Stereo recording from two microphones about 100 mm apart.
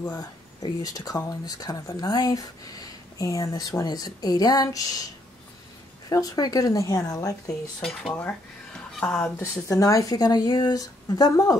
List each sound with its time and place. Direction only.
0.0 s speech: 40° left (ahead or behind)
9.0 s speech: 10° left (ahead or behind)
9.4 s speech: 30° left (ahead or behind)